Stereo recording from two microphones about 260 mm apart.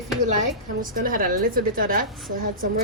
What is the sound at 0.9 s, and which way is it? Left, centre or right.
Speech, right.